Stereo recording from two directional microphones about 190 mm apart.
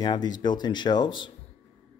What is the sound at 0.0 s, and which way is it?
Speech, 20° left (ahead or behind).